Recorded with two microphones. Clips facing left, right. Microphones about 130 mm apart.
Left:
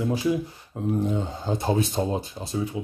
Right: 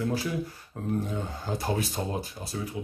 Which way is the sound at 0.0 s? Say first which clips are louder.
Left 5 dB; 20° left (ahead or behind).